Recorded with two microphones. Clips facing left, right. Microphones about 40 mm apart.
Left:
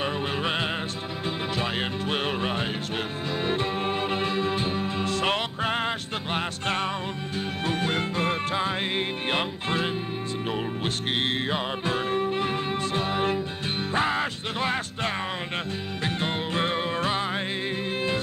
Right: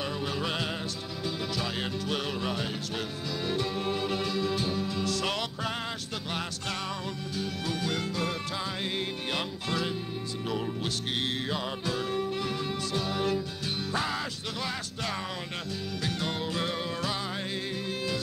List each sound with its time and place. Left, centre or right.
0.0 s music: left
11.1 s music: left